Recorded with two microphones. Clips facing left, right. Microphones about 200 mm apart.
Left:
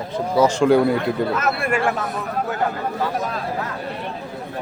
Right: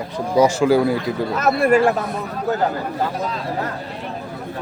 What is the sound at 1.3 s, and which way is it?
Speech, 40° right (ahead or behind).